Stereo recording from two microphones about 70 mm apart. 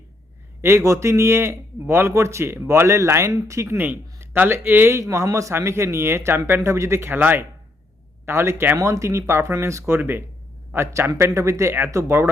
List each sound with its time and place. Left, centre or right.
0.6 s speech: right
3.8 s a man's voice: right
4.9 s speech: right